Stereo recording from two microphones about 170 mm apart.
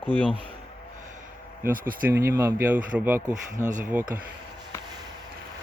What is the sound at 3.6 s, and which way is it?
Speech, 50° right (ahead or behind).